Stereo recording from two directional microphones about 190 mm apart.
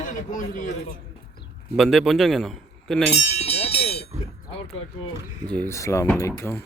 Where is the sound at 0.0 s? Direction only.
45° left (ahead or behind).